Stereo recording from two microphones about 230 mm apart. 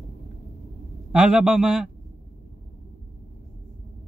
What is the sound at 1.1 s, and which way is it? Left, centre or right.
Speech, centre.